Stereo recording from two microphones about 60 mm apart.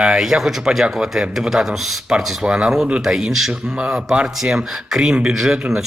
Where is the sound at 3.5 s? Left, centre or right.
Centre.